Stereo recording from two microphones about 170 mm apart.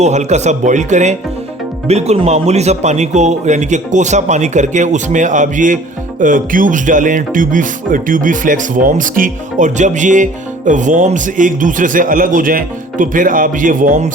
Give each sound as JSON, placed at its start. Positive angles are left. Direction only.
{"t": 0.0, "sound": "a man's voice", "side_deg": -40}